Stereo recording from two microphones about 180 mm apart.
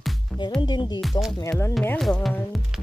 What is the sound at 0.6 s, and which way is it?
Speech, 25° left (ahead or behind).